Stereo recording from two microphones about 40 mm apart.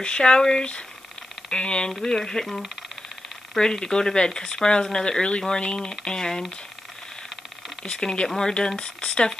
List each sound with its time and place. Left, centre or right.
0.0 s speech: left
1.9 s speech: centre
7.8 s speech: left